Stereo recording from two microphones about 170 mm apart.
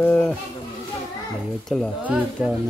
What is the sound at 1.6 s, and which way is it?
Speech, 5° left (ahead or behind).